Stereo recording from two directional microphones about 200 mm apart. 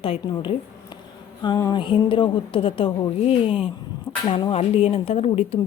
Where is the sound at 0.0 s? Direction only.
30° left (ahead or behind).